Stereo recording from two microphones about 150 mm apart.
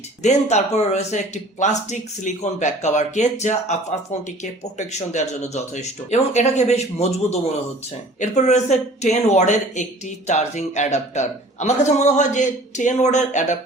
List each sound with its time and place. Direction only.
0.2 s speech: 50° left (ahead or behind)